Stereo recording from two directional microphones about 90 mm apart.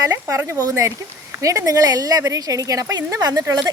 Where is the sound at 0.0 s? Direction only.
40° right (ahead or behind).